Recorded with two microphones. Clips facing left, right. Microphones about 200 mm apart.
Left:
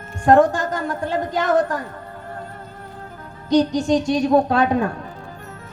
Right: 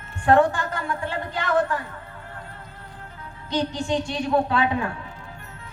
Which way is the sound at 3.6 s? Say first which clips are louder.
Left 5 dB; 40° left (ahead or behind).